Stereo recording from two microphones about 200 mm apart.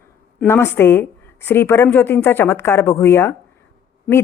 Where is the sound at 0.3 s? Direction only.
10° left (ahead or behind).